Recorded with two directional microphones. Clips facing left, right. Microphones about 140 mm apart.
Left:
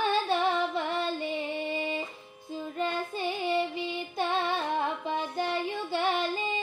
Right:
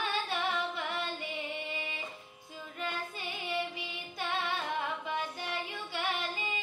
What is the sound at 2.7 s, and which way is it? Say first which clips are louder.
Female singing: left 7 dB; 30° left (ahead or behind).